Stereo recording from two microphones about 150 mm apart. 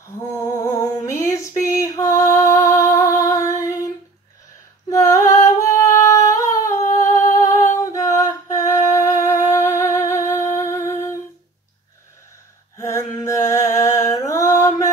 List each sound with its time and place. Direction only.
0.7 s music: 20° left (ahead or behind)
4.8 s female singing: 20° left (ahead or behind)
5.8 s humming: 20° left (ahead or behind)
6.7 s humming: 55° left (ahead or behind)
7.0 s humming: 20° left (ahead or behind)
7.7 s a sound: 20° left (ahead or behind)
12.7 s a sound: 20° left (ahead or behind)